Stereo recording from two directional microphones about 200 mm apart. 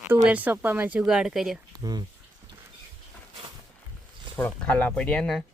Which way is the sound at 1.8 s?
20° right (ahead or behind).